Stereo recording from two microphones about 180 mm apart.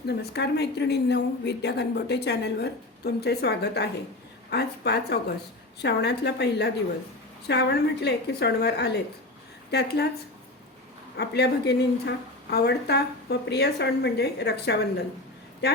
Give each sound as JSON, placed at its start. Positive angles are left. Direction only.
{"t": 0.1, "sound": "a woman's voice", "side_deg": 65}
{"t": 11.2, "sound": "a woman's voice", "side_deg": 65}